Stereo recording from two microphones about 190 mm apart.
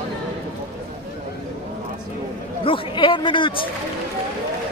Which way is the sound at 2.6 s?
25° left (ahead or behind).